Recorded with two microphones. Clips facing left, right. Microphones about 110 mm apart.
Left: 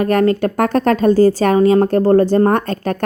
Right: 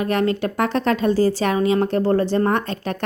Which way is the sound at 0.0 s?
45° left (ahead or behind).